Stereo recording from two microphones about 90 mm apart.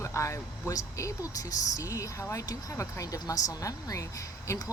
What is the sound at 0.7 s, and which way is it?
A woman's voice, 35° left (ahead or behind).